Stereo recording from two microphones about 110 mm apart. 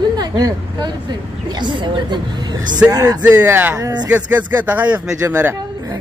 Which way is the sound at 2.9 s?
35° right (ahead or behind).